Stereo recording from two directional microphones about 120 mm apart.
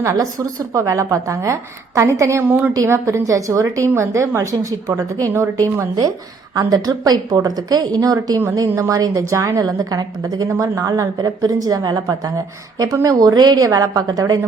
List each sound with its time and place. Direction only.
0.0 s a woman's voice: 25° right (ahead or behind)